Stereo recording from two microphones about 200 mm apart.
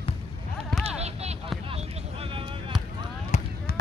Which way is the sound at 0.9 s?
30° right (ahead or behind).